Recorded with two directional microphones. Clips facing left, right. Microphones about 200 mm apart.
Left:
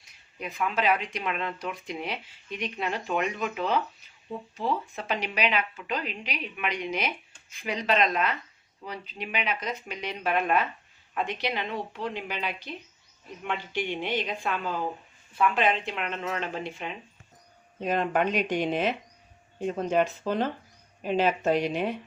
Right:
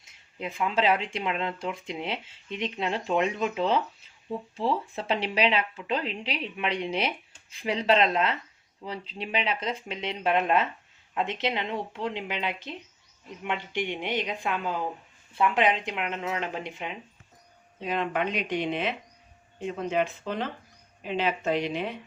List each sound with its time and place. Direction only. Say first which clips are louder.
0.0 s speech: right 2 dB; 25° right (ahead or behind)
17.8 s speech: left 3 dB; 45° left (ahead or behind)